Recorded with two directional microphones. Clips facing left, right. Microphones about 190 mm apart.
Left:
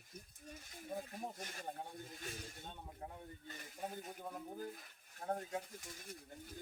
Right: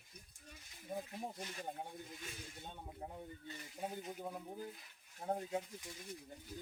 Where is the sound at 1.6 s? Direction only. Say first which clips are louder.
Even; 15° right (ahead or behind).